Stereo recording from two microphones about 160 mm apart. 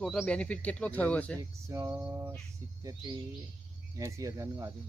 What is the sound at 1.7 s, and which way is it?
Speech, 20° right (ahead or behind).